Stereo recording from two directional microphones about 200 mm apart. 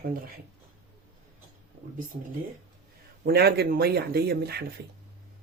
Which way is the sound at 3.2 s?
50° right (ahead or behind).